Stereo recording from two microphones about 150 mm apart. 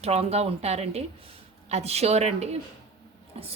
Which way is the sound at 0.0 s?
45° right (ahead or behind).